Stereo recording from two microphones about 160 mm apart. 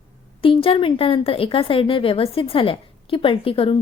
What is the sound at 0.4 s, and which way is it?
A woman's voice, 35° left (ahead or behind).